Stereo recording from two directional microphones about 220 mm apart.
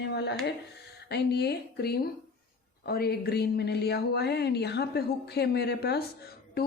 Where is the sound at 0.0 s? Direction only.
50° left (ahead or behind).